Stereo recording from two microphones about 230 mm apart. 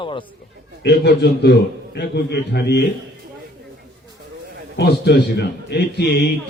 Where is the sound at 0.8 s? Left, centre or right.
Left.